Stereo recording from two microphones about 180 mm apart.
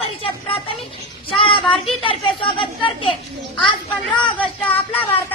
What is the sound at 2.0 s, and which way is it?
Speech, 30° left (ahead or behind).